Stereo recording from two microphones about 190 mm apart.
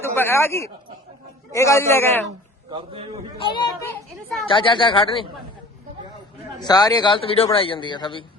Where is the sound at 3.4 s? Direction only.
25° left (ahead or behind).